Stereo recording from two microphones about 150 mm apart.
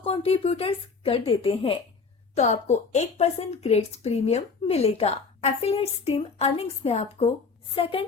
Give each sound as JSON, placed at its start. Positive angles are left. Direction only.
{"t": 0.0, "sound": "speech", "side_deg": 40}
{"t": 2.3, "sound": "a woman's voice", "side_deg": 50}